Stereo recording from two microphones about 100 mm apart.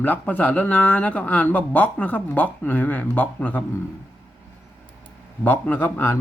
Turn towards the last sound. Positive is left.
turn(degrees=20)  # may be behind; listen again after turning